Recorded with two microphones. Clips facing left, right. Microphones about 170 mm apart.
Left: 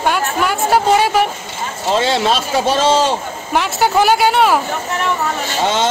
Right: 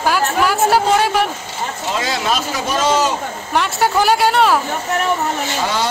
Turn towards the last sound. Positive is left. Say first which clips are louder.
# left 3 dB
turn(degrees=20)  # may be behind; listen again after turning